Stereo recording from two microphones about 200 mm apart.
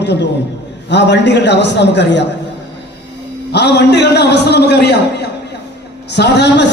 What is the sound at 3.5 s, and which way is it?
A man's voice, 60° left (ahead or behind).